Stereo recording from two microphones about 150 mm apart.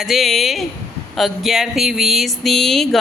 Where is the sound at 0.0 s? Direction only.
Centre (ahead or behind).